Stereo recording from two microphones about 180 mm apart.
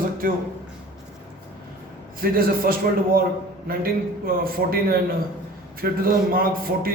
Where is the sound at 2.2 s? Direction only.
55° right (ahead or behind).